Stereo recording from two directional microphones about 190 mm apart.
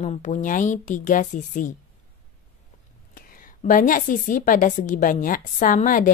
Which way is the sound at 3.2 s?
45° left (ahead or behind).